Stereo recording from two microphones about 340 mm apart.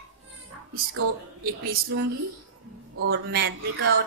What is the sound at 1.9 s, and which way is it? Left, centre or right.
Speech, right.